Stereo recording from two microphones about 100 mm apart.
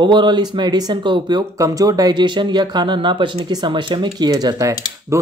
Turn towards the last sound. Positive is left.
turn(degrees=-30)  # may be behind; listen again after turning